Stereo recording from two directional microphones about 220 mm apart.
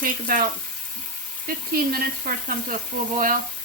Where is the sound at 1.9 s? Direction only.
40° right (ahead or behind).